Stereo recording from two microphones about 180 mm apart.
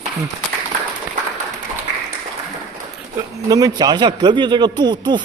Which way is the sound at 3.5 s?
20° right (ahead or behind).